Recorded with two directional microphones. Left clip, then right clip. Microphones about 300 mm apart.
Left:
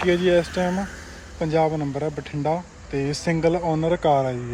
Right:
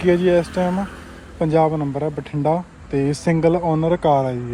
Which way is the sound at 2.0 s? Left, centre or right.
Centre.